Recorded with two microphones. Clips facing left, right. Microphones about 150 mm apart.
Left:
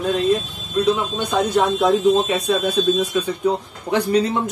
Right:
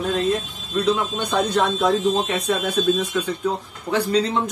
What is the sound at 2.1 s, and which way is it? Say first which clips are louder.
Speech: left 3 dB; centre (ahead or behind).